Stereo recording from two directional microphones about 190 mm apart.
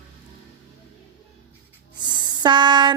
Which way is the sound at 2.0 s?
25° right (ahead or behind).